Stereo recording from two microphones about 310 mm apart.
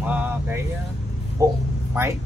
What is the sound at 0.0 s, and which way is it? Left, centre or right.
Speech, centre.